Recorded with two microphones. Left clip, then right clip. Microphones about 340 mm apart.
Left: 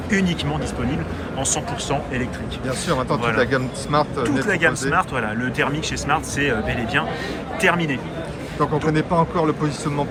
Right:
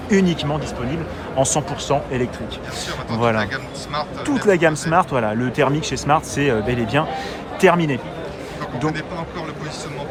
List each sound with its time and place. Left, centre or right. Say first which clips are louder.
0.1 s speech: right 4 dB; centre
3.3 s speech: left 3 dB; centre
4.2 s speech: right 2 dB; centre
8.9 s speech: left 7 dB; centre